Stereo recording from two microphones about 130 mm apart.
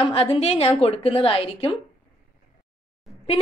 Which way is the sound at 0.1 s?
50° left (ahead or behind).